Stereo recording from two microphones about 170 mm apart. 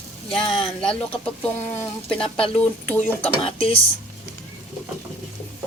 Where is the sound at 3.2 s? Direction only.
35° left (ahead or behind).